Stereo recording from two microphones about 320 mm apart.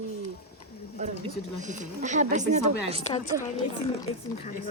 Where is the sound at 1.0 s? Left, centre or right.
Right.